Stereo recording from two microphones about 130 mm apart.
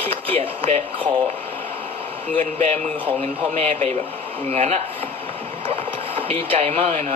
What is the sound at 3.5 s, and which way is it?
Speech, 55° right (ahead or behind).